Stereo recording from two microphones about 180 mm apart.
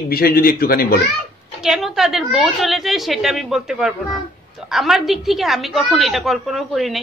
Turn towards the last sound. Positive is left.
turn(degrees=0)  # may be behind; listen again after turning